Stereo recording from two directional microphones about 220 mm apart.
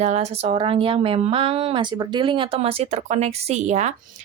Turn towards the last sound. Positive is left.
turn(degrees=-30)  # may be behind; listen again after turning